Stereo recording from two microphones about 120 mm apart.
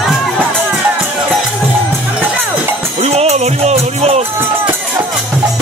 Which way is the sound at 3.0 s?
60° right (ahead or behind).